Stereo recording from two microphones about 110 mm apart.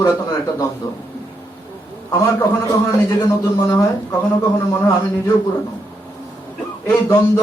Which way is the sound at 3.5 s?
25° left (ahead or behind).